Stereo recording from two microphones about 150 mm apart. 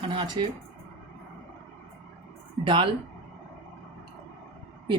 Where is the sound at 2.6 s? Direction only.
30° right (ahead or behind).